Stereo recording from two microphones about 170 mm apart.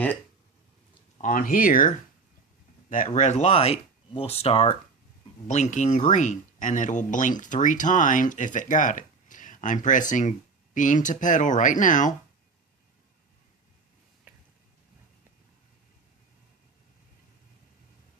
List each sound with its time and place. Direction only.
1.2 s speech: 55° left (ahead or behind)
3.2 s speech: 40° left (ahead or behind)
5.5 s speech: 45° left (ahead or behind)